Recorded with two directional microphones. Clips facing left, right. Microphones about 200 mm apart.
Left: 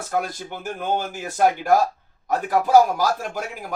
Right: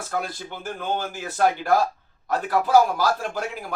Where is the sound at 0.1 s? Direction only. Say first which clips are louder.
Left 4 dB; 15° left (ahead or behind).